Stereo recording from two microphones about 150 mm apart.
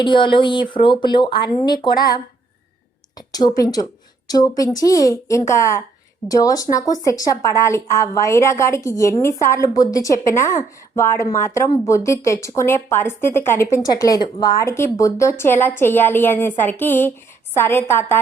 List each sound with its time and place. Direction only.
0.0 s a woman's voice: 35° left (ahead or behind); by 18.2 s 15° left (ahead or behind)